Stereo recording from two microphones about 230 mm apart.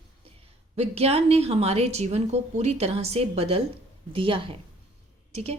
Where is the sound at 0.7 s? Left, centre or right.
Right.